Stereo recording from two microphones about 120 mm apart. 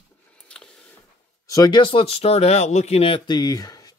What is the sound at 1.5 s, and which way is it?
Speech, 35° left (ahead or behind).